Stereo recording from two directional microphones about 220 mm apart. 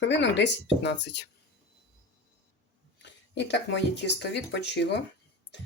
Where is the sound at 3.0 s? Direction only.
55° left (ahead or behind).